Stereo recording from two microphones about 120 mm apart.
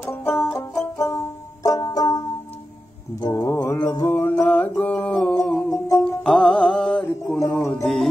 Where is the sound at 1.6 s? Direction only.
30° left (ahead or behind).